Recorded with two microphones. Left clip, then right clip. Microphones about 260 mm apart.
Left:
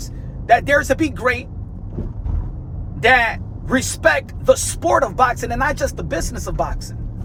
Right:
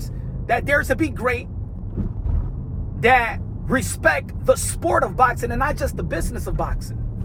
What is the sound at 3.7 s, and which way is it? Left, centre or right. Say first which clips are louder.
Speech: left 3 dB; centre.